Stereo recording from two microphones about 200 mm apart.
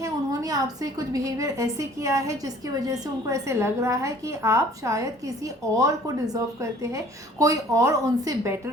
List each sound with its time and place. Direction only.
0.0 s a woman's voice: 15° right (ahead or behind)